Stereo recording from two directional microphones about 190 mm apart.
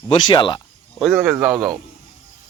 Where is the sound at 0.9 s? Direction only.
5° right (ahead or behind).